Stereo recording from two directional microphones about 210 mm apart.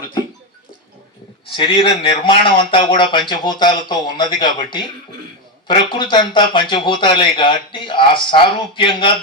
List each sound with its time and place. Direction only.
1.5 s speech: 25° left (ahead or behind)